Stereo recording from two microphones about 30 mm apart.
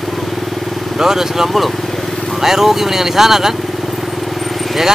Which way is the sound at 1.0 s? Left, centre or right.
Centre.